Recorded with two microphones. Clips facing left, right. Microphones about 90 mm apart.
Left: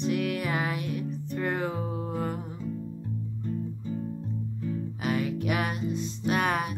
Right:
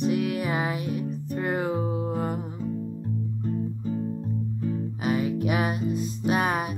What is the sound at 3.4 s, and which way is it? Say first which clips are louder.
Music: right 4 dB; 45° right (ahead or behind).